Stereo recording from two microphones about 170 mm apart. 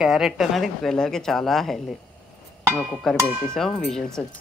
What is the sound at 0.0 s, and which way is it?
Speech, centre (ahead or behind).